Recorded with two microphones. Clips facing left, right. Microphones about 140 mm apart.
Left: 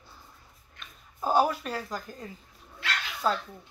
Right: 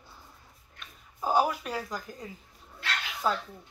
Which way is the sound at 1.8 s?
5° left (ahead or behind).